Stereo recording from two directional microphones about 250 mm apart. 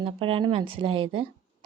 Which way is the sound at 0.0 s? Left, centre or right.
Right.